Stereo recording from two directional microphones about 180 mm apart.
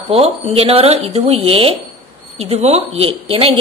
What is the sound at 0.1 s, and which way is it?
Speech, 35° right (ahead or behind).